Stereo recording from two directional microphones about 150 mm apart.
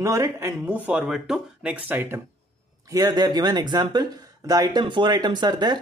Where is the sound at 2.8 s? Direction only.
25° right (ahead or behind).